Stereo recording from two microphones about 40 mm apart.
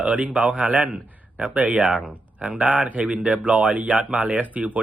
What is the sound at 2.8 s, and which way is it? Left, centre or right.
A man's voice, right.